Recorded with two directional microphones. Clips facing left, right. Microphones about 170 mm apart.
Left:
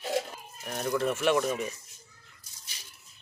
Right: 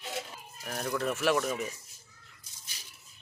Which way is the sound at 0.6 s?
5° right (ahead or behind).